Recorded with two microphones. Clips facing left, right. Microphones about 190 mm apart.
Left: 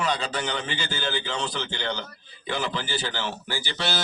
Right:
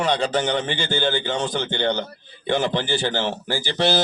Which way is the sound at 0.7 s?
30° right (ahead or behind).